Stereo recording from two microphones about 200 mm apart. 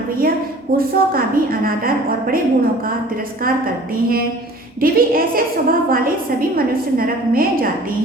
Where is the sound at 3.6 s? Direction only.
45° right (ahead or behind).